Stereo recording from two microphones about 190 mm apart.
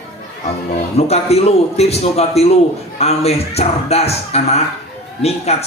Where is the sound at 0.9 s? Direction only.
35° left (ahead or behind).